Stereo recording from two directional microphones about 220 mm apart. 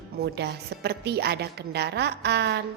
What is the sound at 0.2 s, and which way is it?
A woman's voice, 50° right (ahead or behind).